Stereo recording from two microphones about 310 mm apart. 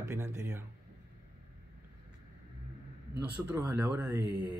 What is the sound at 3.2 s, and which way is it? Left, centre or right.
Speech, centre.